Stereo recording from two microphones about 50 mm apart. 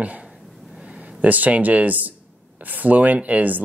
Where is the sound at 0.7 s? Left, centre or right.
Centre.